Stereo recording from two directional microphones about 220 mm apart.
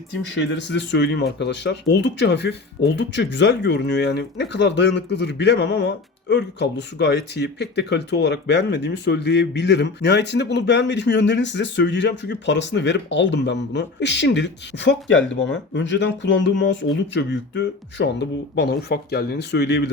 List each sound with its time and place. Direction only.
0.3 s speech: 55° left (ahead or behind)